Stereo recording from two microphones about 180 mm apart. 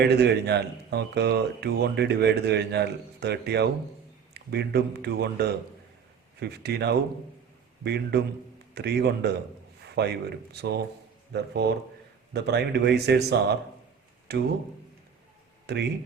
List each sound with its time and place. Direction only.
0.0 s speech: 65° right (ahead or behind)
8.7 s speech: 65° right (ahead or behind)
15.6 s speech: 70° right (ahead or behind)